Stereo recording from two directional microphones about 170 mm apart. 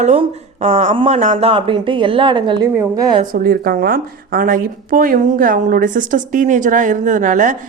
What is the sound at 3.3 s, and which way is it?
A woman's voice, 60° right (ahead or behind).